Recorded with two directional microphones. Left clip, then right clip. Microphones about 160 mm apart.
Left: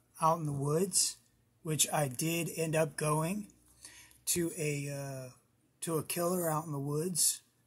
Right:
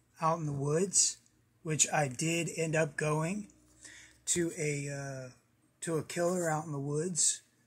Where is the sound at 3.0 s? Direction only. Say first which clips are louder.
Even; 15° left (ahead or behind).